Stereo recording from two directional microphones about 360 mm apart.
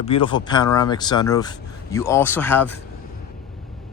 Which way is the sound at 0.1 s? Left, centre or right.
Centre.